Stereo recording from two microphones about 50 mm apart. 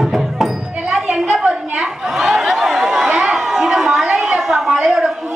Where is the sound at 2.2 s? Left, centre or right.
Centre.